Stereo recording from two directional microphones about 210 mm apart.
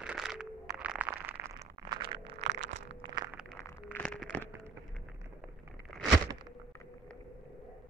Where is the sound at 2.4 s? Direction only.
60° right (ahead or behind).